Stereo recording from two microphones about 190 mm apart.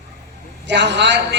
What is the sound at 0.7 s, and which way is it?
Speech, 65° right (ahead or behind).